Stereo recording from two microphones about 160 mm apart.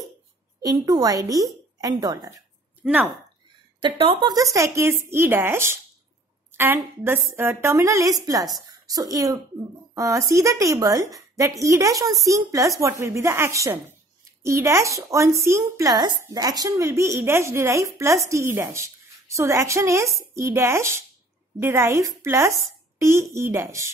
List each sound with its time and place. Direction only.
0.6 s a woman's voice: 25° right (ahead or behind)
2.8 s speech: 5° right (ahead or behind)
3.8 s a woman's voice: 30° right (ahead or behind)